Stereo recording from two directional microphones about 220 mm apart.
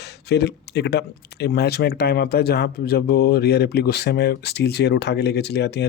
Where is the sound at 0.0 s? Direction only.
50° left (ahead or behind).